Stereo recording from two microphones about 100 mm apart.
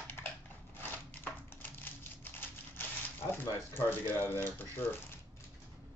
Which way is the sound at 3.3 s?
20° left (ahead or behind).